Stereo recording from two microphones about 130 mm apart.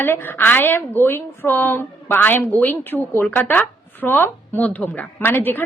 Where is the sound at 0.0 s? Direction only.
15° left (ahead or behind).